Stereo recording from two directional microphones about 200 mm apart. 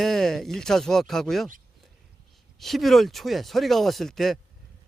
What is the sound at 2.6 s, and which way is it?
Speech, centre (ahead or behind).